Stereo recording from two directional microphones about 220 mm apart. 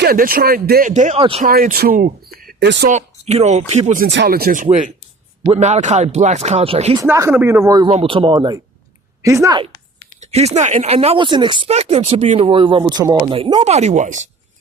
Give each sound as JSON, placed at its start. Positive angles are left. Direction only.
{"t": 0.0, "sound": "speech", "side_deg": -40}
{"t": 1.5, "sound": "speech", "side_deg": -40}
{"t": 2.9, "sound": "speech", "side_deg": -30}
{"t": 4.1, "sound": "speech", "side_deg": -50}
{"t": 6.9, "sound": "speech", "side_deg": -15}
{"t": 10.2, "sound": "speech", "side_deg": -30}